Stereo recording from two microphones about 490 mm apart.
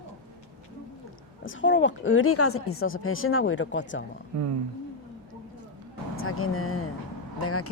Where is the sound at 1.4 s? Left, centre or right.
Left.